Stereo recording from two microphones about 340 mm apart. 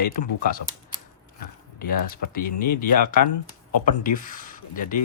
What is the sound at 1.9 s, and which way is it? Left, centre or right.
Speech, left.